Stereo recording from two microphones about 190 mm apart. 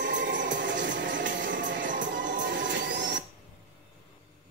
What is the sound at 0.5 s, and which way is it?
Music, 70° right (ahead or behind).